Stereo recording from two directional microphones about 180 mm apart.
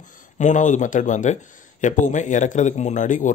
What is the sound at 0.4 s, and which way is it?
Speech, 45° left (ahead or behind).